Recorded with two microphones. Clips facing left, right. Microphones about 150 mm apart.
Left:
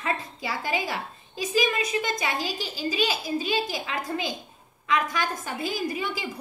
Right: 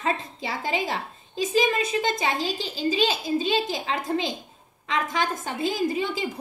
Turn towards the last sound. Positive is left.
turn(degrees=-25)  # may be behind; listen again after turning